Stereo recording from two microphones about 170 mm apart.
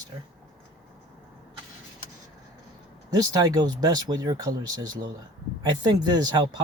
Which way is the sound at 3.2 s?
20° right (ahead or behind).